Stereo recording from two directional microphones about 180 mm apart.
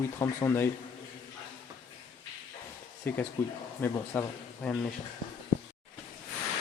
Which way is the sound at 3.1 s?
10° left (ahead or behind).